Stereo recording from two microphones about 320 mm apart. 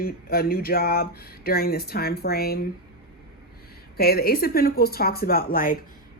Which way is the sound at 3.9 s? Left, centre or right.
Left.